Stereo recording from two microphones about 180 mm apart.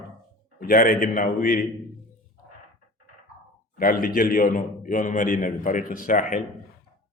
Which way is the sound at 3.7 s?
55° left (ahead or behind).